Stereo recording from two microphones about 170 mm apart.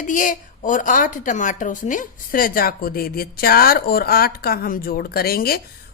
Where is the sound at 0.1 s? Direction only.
50° left (ahead or behind).